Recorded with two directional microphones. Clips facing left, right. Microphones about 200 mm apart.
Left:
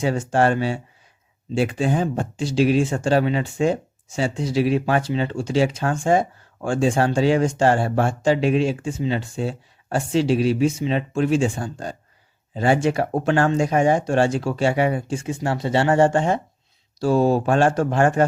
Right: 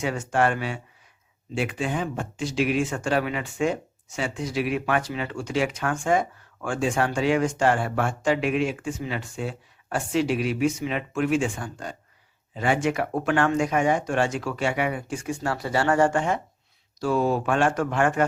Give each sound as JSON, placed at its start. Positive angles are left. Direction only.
{"t": 0.0, "sound": "speech", "side_deg": 30}